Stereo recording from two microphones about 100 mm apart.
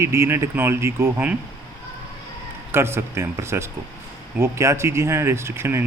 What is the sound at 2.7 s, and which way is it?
Speech, 25° right (ahead or behind).